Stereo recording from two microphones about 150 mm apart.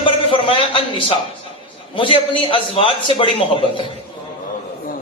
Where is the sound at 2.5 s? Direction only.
35° left (ahead or behind).